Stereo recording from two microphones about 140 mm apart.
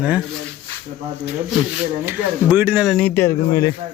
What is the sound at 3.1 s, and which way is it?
Speech, 20° left (ahead or behind).